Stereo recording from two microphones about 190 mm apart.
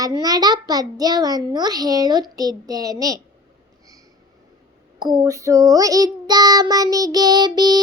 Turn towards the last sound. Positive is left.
turn(degrees=-20)  # may be behind; listen again after turning